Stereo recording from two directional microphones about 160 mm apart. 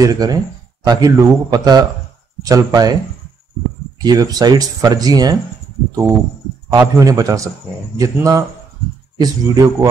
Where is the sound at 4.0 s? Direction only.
25° right (ahead or behind).